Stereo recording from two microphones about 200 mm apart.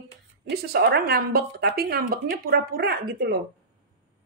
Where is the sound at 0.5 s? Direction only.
55° right (ahead or behind).